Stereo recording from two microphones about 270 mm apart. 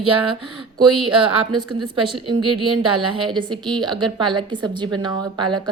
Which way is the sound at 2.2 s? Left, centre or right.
Centre.